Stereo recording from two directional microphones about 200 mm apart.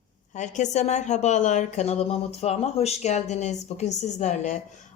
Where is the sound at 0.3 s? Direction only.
35° left (ahead or behind).